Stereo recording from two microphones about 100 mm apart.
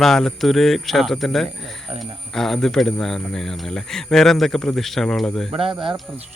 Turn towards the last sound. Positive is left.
turn(degrees=-65)  # may be behind; listen again after turning